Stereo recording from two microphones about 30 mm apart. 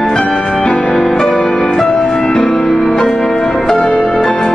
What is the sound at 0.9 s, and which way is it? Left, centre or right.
Music, centre.